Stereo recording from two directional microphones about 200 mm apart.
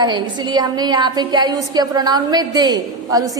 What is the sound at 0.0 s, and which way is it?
A woman's voice, 20° right (ahead or behind).